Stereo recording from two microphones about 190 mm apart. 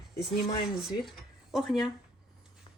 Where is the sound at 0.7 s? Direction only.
Centre (ahead or behind).